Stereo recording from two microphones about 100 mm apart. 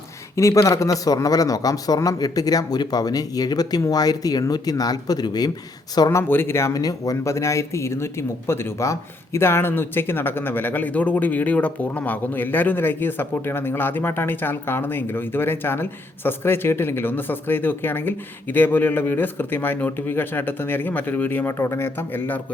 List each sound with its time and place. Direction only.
0.3 s a man's voice: 30° left (ahead or behind)
6.1 s speech: 20° left (ahead or behind)